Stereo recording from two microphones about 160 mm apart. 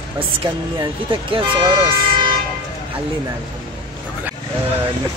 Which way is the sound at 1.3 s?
35° right (ahead or behind).